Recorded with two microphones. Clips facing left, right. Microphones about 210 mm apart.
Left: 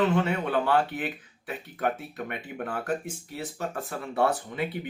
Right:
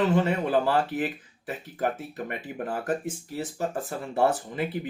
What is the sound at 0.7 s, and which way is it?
Speech, centre (ahead or behind).